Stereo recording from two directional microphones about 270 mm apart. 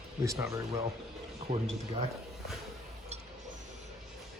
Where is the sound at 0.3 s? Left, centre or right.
Centre.